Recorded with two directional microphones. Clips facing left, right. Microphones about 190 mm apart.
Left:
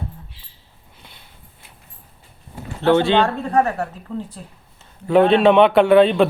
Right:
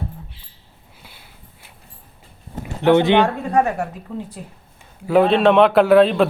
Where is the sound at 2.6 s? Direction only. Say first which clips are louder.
Right 2 dB; 15° right (ahead or behind).